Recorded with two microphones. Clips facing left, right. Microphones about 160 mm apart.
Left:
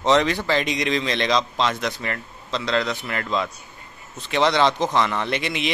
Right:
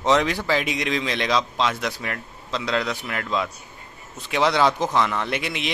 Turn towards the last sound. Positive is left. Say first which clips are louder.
# left 2 dB
turn(degrees=0)  # may be behind; listen again after turning